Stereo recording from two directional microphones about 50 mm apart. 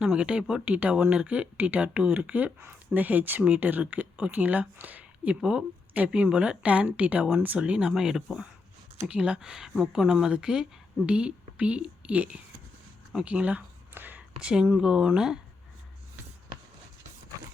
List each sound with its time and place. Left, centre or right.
0.0 s speech: centre
0.9 s speech: centre
5.3 s speech: centre
7.9 s speech: centre
9.0 s speech: right
9.4 s a woman's voice: centre; by 13.6 s right
13.9 s a sound: right
14.2 s speech: centre